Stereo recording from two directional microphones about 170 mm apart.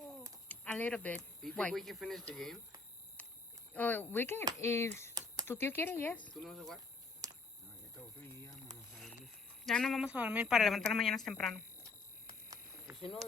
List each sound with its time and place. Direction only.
0.4 s speech: 10° left (ahead or behind)
3.2 s a sound: 10° left (ahead or behind)
3.7 s speech: 10° left (ahead or behind)
7.2 s cricket: 20° right (ahead or behind)
7.9 s a sound: 15° left (ahead or behind)
9.0 s speech: centre (ahead or behind)